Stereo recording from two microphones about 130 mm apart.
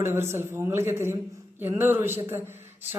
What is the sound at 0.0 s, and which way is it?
A man's voice, 20° right (ahead or behind).